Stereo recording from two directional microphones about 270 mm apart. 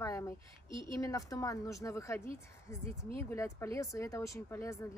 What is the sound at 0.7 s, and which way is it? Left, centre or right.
Speech, centre.